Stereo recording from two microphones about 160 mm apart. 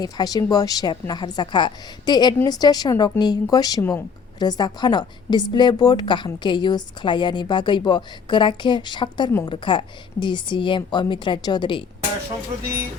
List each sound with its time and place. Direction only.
0.0 s a woman's voice: 25° left (ahead or behind)